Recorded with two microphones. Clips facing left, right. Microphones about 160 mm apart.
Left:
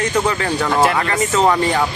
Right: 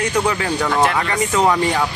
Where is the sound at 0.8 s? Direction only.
5° left (ahead or behind).